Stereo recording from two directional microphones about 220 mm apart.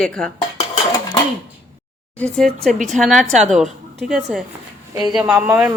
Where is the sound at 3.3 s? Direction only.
30° right (ahead or behind).